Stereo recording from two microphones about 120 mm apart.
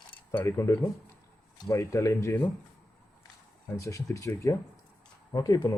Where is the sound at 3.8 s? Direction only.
25° left (ahead or behind).